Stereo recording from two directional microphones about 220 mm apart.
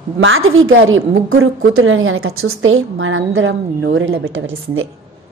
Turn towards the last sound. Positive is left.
turn(degrees=-65)  # may be behind; listen again after turning